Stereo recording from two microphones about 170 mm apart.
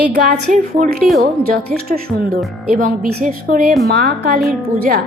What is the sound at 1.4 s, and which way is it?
A woman's voice, 60° right (ahead or behind).